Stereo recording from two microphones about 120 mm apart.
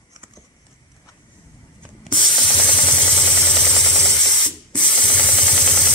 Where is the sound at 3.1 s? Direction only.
5° left (ahead or behind).